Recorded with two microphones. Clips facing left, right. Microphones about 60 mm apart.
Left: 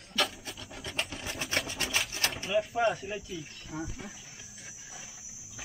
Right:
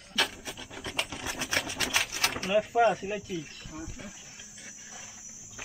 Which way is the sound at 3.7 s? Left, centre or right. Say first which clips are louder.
Left 4 dB; left.